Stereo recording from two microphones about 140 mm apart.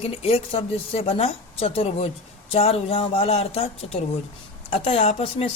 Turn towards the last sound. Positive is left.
turn(degrees=45)  # may be behind; listen again after turning